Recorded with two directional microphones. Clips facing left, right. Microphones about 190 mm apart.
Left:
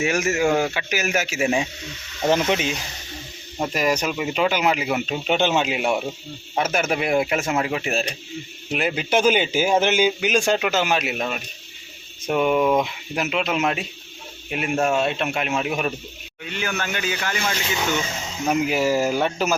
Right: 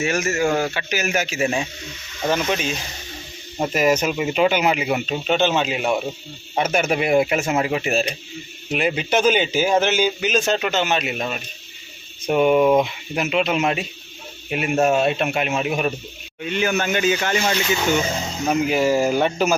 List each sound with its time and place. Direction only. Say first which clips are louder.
0.0 s speech: even; 15° left (ahead or behind)
3.6 s speech: right 3 dB; 5° right (ahead or behind)
16.4 s speech: right 6 dB; 20° right (ahead or behind)
18.4 s speech: right 2 dB; 5° left (ahead or behind)